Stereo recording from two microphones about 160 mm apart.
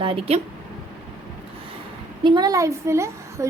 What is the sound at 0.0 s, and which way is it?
Speech, 30° right (ahead or behind).